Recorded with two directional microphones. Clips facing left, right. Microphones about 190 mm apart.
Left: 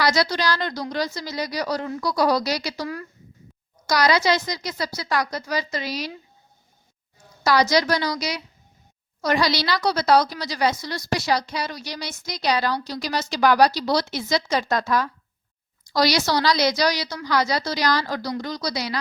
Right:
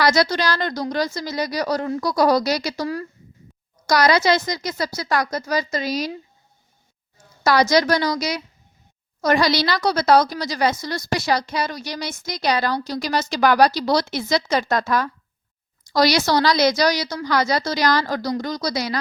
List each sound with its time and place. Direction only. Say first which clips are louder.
0.0 s a woman's voice: right 3 dB; 50° right (ahead or behind)
2.8 s speech: right 5 dB; 30° right (ahead or behind)
3.8 s a woman's voice: right 3 dB; 50° right (ahead or behind)
7.4 s a woman's voice: right 2 dB; 50° right (ahead or behind)